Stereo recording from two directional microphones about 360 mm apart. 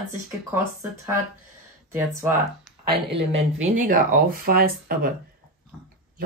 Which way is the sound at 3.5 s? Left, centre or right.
Right.